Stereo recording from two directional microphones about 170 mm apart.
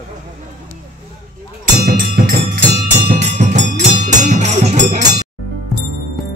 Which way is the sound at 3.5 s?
45° right (ahead or behind).